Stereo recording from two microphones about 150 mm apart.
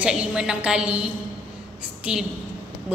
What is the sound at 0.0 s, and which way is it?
A woman's voice, 5° right (ahead or behind).